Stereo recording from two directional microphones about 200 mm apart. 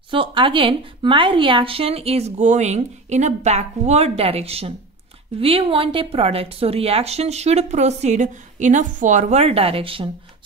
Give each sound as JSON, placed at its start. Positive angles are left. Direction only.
{"t": 0.1, "sound": "a woman's voice", "side_deg": -25}